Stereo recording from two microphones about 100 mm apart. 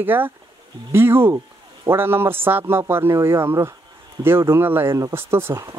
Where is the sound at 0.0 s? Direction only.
20° right (ahead or behind).